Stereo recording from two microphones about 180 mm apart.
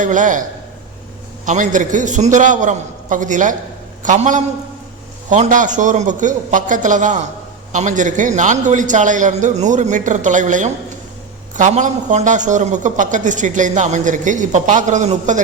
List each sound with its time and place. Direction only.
0.0 s speech: 45° right (ahead or behind)
1.5 s speech: 45° right (ahead or behind)